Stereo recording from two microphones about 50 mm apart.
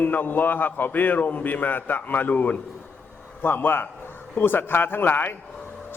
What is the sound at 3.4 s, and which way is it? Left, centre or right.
A man's voice, left.